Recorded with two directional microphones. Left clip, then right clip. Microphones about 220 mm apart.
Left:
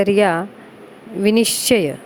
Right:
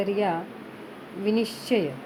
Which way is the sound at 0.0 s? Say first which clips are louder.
Left 10 dB; 45° left (ahead or behind).